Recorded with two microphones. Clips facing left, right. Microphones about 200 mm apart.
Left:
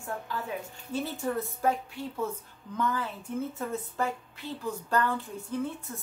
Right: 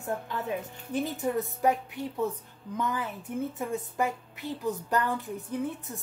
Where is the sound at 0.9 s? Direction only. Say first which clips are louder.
Right 2 dB; 15° right (ahead or behind).